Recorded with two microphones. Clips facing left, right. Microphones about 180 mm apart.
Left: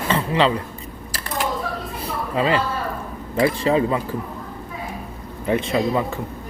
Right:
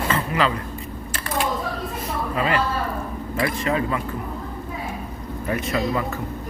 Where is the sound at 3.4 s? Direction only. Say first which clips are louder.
Left 5 dB; 30° left (ahead or behind).